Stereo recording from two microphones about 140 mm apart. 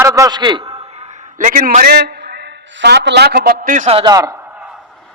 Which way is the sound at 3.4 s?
80° right.